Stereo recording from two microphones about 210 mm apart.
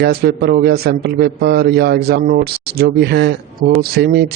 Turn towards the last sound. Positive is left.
turn(degrees=-50)  # may be behind; listen again after turning